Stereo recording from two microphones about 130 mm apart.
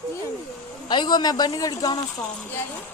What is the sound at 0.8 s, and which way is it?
A man's voice, 35° left (ahead or behind).